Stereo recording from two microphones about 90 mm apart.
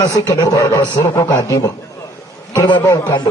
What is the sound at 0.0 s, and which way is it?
A man's voice, 45° left (ahead or behind).